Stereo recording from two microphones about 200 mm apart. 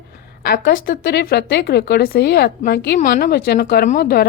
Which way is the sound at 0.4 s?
50° left (ahead or behind).